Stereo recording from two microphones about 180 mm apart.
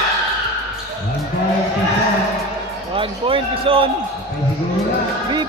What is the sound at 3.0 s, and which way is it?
Speech, 30° right (ahead or behind).